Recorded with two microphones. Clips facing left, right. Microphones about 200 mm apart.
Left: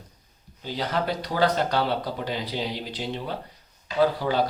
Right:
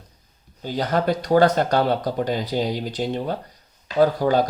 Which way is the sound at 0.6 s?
45° right (ahead or behind).